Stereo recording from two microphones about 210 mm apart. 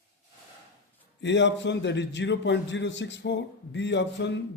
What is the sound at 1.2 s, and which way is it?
A man's voice, 55° left (ahead or behind).